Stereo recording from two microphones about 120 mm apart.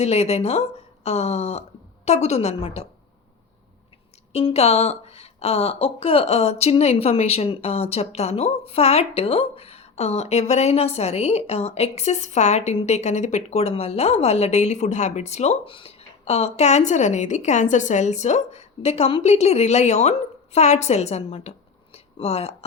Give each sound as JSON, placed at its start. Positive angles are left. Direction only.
{"t": 0.0, "sound": "speech", "side_deg": 65}
{"t": 4.3, "sound": "speech", "side_deg": 60}
{"t": 21.9, "sound": "a sound", "side_deg": 60}